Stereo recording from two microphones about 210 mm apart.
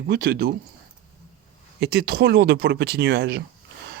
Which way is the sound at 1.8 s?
50° right (ahead or behind).